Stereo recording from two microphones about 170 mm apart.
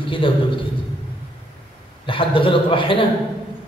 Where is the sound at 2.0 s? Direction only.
30° left (ahead or behind).